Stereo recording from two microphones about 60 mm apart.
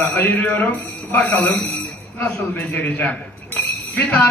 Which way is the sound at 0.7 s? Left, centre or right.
Left.